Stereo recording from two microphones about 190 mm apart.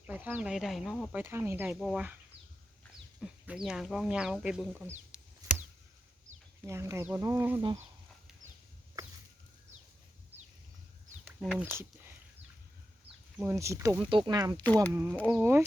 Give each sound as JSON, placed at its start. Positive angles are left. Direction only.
{"t": 0.1, "sound": "speech", "side_deg": -10}
{"t": 1.1, "sound": "speech", "side_deg": -10}
{"t": 6.7, "sound": "speech", "side_deg": -15}
{"t": 11.3, "sound": "speech", "side_deg": 0}
{"t": 11.6, "sound": "speech", "side_deg": -10}
{"t": 13.4, "sound": "speech", "side_deg": -15}
{"t": 14.1, "sound": "speech", "side_deg": -25}